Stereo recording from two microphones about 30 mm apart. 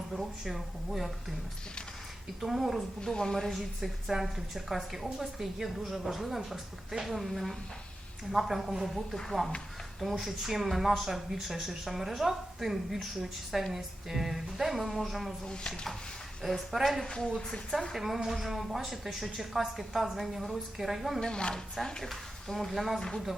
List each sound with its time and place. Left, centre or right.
0.1 s speech: centre
2.4 s speech: centre
3.3 s a woman's voice: centre
3.6 s speech: centre
10.0 s speech: centre
16.7 s speech: centre
17.1 s a woman's voice: left
17.3 s a woman's voice: centre
17.9 s speech: centre
21.2 s a woman's voice: left
22.0 s speech: centre
23.0 s a woman's voice: centre